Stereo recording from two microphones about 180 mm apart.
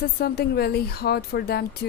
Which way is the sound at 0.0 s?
60° left (ahead or behind).